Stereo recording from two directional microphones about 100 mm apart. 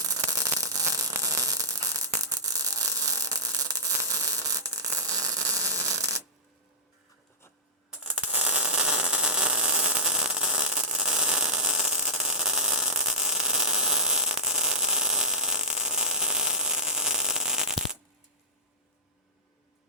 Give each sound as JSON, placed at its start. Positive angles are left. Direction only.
{"t": 0.0, "sound": "static", "side_deg": -35}
{"t": 8.0, "sound": "static", "side_deg": -10}